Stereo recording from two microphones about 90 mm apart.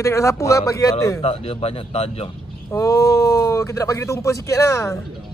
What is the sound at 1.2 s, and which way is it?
Speech, 90° left.